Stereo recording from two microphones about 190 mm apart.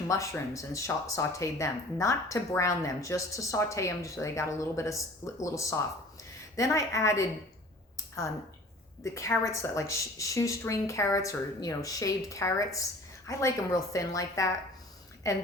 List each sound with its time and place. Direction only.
0.1 s speech: 15° left (ahead or behind)
9.0 s speech: 15° left (ahead or behind)